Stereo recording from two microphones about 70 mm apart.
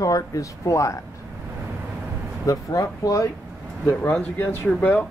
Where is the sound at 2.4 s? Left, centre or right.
Left.